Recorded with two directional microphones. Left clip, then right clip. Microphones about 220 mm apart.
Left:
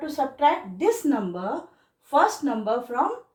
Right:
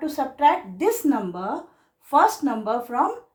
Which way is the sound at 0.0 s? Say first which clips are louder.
Right 2 dB; 30° right (ahead or behind).